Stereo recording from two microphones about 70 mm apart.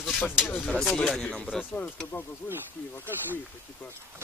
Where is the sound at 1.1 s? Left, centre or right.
Centre.